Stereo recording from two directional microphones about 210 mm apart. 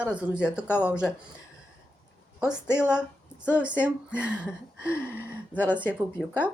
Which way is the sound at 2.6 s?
10° left (ahead or behind).